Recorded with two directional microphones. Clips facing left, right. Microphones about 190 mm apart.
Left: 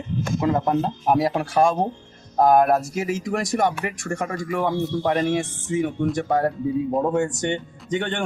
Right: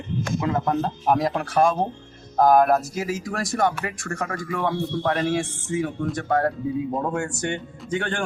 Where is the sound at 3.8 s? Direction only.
10° left (ahead or behind).